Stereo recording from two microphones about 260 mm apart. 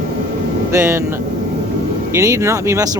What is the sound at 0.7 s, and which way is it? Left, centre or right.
Speech, centre.